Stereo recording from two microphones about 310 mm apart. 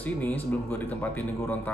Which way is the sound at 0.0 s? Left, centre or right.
Centre.